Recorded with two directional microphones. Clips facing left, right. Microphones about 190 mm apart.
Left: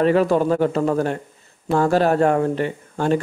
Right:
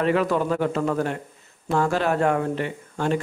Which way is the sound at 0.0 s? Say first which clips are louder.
Left 5 dB; 35° left (ahead or behind).